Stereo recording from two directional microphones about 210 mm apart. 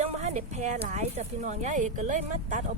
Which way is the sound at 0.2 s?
30° right (ahead or behind).